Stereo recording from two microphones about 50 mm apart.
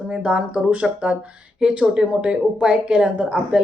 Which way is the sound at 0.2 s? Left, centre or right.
Right.